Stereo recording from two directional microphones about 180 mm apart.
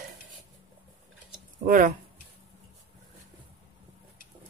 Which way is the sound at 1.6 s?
50° right (ahead or behind).